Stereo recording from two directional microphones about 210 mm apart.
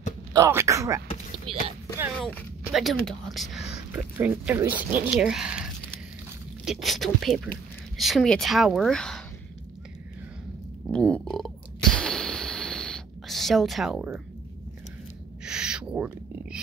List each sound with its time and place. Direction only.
0.3 s speech: 15° right (ahead or behind)
2.1 s a woman's voice: centre (ahead or behind)
10.9 s a sound: 5° left (ahead or behind)
15.4 s owl: 5° right (ahead or behind)